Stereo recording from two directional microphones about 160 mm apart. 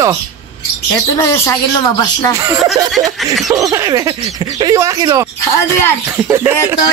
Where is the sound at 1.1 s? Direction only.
15° left (ahead or behind).